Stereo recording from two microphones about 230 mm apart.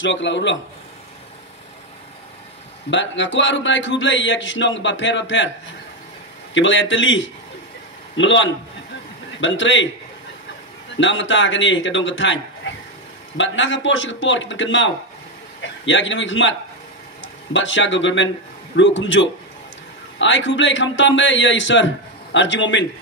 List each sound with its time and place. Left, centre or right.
0.0 s a man's voice: left
2.9 s a man's voice: left
6.5 s a man's voice: left
11.0 s a man's voice: left
13.4 s a man's voice: left